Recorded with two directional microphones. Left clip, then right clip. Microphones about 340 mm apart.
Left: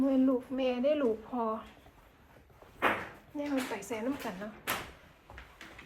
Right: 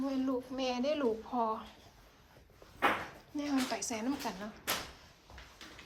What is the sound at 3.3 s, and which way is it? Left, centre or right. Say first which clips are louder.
A woman's voice: even; centre.